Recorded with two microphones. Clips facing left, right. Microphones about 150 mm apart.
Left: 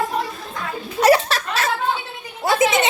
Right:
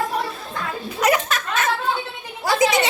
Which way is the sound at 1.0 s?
35° left (ahead or behind).